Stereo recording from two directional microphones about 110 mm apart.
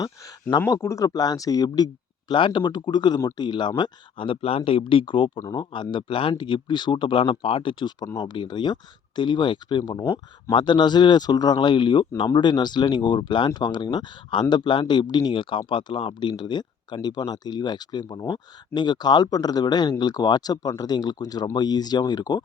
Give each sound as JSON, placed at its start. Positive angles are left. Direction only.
{"t": 0.7, "sound": "a man's voice", "side_deg": 30}
{"t": 8.2, "sound": "a man's voice", "side_deg": 45}
{"t": 10.0, "sound": "speech", "side_deg": 20}
{"t": 10.5, "sound": "a man's voice", "side_deg": 45}